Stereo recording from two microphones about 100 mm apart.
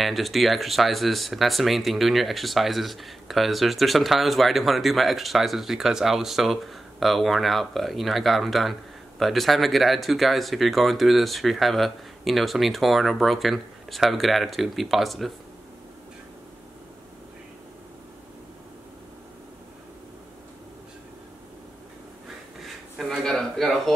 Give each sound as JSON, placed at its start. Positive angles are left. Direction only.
{"t": 0.0, "sound": "speech", "side_deg": 0}
{"t": 22.6, "sound": "a sound", "side_deg": -5}
{"t": 23.2, "sound": "speech", "side_deg": 5}